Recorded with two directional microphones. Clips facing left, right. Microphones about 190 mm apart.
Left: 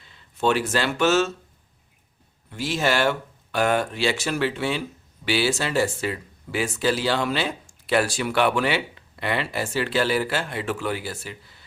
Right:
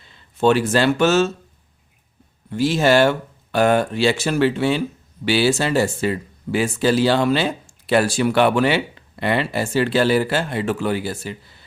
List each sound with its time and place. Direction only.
0.4 s speech: 30° right (ahead or behind)
2.5 s speech: 35° right (ahead or behind)